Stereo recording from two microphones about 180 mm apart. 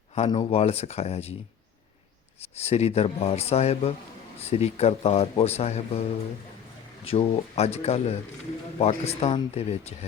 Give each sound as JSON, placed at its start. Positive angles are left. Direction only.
{"t": 0.1, "sound": "speech", "side_deg": 30}
{"t": 2.6, "sound": "speech", "side_deg": 35}
{"t": 7.0, "sound": "speech", "side_deg": 35}